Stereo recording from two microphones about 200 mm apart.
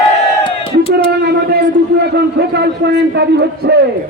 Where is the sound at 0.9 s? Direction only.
55° right (ahead or behind).